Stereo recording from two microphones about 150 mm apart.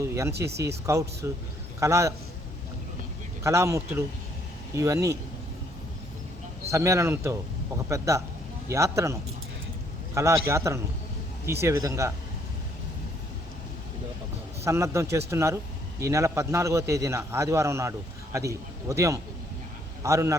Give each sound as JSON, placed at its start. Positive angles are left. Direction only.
{"t": 0.0, "sound": "a sound", "side_deg": -20}
{"t": 0.9, "sound": "a man's voice", "side_deg": -20}
{"t": 3.4, "sound": "a man's voice", "side_deg": -20}
{"t": 6.7, "sound": "a man's voice", "side_deg": -20}
{"t": 10.2, "sound": "a man's voice", "side_deg": -20}
{"t": 14.6, "sound": "a man's voice", "side_deg": -20}